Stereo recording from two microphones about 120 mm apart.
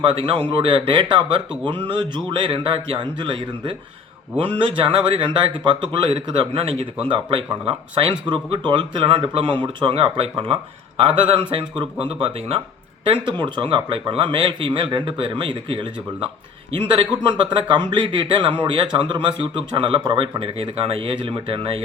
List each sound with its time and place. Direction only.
0.0 s speech: 45° right (ahead or behind)